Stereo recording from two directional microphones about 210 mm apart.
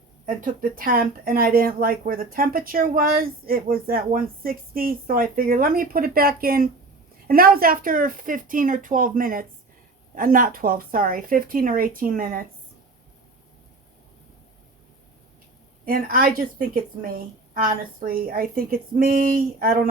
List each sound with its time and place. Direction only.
0.3 s speech: 40° right (ahead or behind)
15.9 s speech: 45° right (ahead or behind)